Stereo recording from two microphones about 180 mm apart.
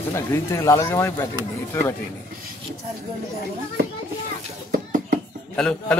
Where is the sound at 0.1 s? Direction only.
15° left (ahead or behind).